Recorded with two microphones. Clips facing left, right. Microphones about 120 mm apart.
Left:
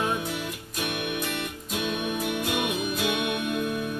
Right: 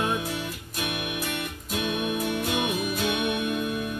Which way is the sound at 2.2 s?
10° left (ahead or behind).